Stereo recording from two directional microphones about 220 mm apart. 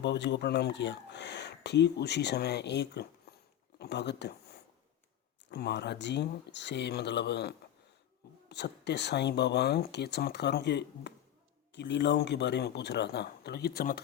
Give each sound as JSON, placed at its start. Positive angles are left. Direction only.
{"t": 0.0, "sound": "speech", "side_deg": 50}
{"t": 5.5, "sound": "speech", "side_deg": 50}